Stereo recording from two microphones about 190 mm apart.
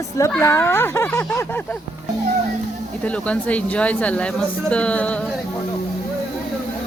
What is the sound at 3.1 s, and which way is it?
Speech, 5° left (ahead or behind).